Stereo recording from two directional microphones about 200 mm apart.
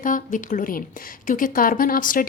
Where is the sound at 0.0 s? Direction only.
40° left (ahead or behind).